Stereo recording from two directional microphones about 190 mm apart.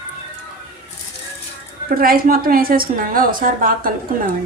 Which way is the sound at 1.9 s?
50° right (ahead or behind).